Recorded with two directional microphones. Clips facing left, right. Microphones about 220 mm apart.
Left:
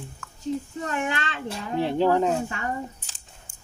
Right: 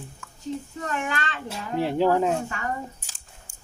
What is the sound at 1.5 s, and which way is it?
Speech, 5° right (ahead or behind).